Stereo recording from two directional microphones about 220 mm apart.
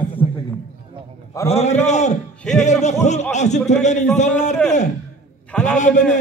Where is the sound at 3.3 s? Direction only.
30° left (ahead or behind).